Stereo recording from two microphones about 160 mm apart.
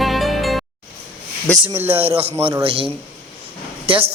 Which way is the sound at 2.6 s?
35° right (ahead or behind).